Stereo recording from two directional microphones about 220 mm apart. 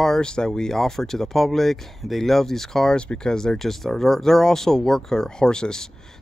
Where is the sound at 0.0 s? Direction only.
5° left (ahead or behind).